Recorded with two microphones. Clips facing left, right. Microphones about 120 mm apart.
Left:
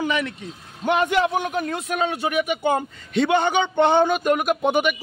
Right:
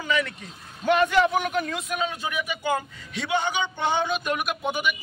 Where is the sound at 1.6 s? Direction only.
55° left (ahead or behind).